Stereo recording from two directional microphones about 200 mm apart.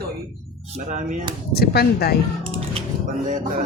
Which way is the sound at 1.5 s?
50° left (ahead or behind).